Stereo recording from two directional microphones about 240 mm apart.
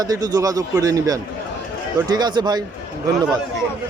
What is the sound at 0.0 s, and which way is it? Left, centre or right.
Speech, centre.